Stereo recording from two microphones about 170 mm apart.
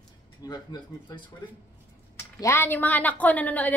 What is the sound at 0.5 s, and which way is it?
Speech, 25° left (ahead or behind).